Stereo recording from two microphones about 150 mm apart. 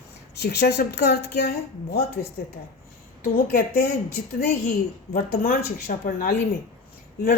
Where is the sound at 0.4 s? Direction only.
90° left.